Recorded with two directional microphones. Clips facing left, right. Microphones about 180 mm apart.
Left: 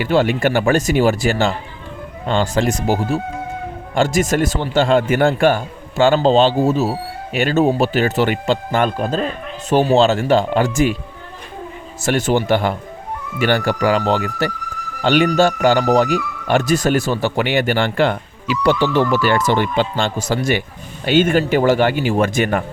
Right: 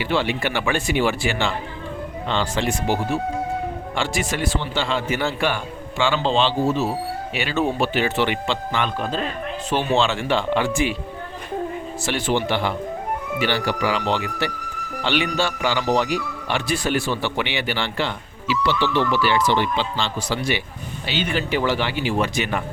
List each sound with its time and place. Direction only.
0.0 s speech: 45° left (ahead or behind)
12.0 s speech: 45° left (ahead or behind)